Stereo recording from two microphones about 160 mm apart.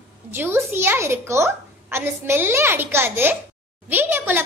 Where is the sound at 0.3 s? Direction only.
15° right (ahead or behind).